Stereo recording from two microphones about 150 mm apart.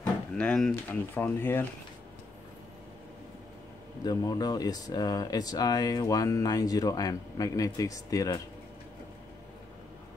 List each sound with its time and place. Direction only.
0.4 s speech: 5° left (ahead or behind)
4.0 s speech: 25° left (ahead or behind)